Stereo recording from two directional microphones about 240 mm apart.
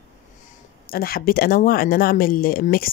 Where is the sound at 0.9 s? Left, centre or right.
Left.